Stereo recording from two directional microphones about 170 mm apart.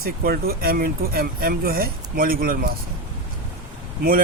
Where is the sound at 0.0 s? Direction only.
60° right (ahead or behind).